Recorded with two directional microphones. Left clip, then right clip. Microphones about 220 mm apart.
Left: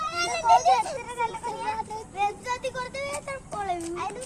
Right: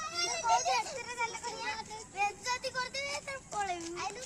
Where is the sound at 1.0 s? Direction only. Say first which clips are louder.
Left 7 dB; 10° right (ahead or behind).